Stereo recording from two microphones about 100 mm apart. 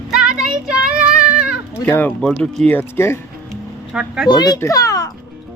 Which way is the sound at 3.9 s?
10° right (ahead or behind).